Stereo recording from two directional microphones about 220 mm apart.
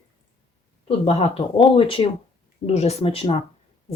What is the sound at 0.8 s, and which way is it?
A woman's voice, 25° left (ahead or behind).